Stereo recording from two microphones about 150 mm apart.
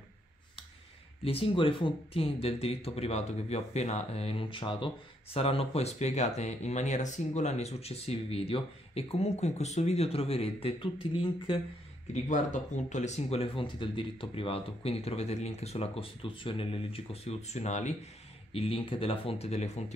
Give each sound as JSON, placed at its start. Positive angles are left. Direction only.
{"t": 1.2, "sound": "speech", "side_deg": 40}
{"t": 12.1, "sound": "speech", "side_deg": 55}
{"t": 18.5, "sound": "speech", "side_deg": 40}